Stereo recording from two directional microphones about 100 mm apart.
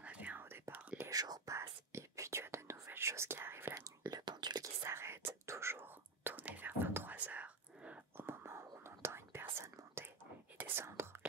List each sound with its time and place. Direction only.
0.0 s whispering: 15° right (ahead or behind)
1.1 s whispering: 40° right (ahead or behind)
4.8 s whispering: 25° right (ahead or behind)
8.3 s whispering: 25° right (ahead or behind)
10.6 s whispering: 25° right (ahead or behind)